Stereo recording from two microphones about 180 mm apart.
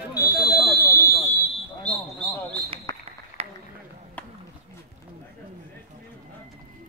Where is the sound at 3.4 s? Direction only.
35° right (ahead or behind).